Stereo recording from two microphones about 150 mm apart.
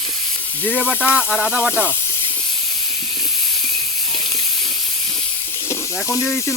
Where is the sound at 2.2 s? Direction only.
35° left (ahead or behind).